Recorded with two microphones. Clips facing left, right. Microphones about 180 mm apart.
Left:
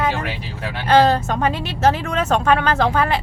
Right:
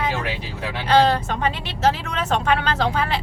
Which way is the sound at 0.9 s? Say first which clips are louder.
Left 3 dB; 45° left (ahead or behind).